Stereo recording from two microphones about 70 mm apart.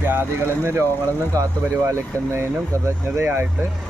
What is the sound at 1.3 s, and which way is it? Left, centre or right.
Speech, right.